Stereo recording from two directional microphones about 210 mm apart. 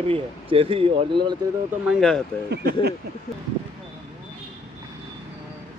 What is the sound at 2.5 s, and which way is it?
Speech, 50° right (ahead or behind).